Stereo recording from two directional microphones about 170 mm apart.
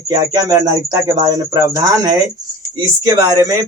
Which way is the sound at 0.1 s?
25° right (ahead or behind).